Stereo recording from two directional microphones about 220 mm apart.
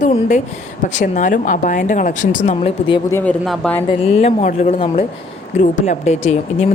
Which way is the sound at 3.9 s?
30° left (ahead or behind).